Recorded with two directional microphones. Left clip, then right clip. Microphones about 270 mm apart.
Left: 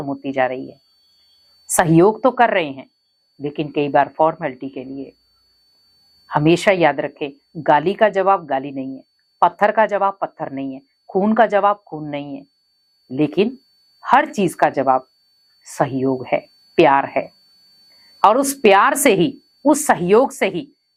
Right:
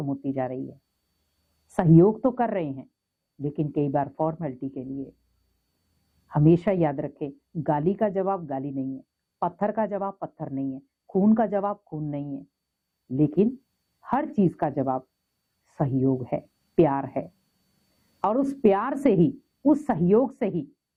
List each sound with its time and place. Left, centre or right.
0.0 s speech: centre
1.6 s speech: centre
4.9 s speech: left
6.2 s speech: centre
11.9 s speech: left
12.1 s a woman's voice: centre